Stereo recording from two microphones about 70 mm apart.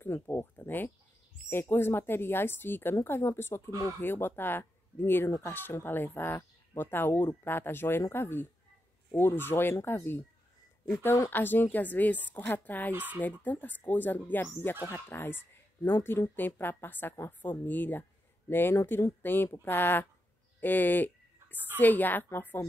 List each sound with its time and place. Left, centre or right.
0.0 s a woman's voice: left
11.2 s speech: left
12.9 s speech: right
13.2 s a woman's voice: left
20.6 s a sound: left
21.7 s speech: left